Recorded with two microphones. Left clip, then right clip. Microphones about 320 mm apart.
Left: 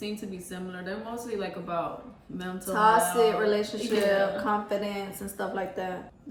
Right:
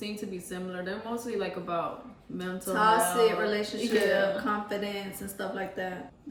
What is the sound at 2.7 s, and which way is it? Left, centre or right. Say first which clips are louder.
Speech: left 2 dB; centre.